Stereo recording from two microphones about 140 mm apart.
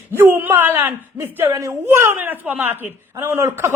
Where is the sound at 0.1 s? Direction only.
15° right (ahead or behind).